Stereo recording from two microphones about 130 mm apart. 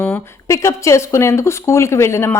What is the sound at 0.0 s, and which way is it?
Speech, 20° left (ahead or behind).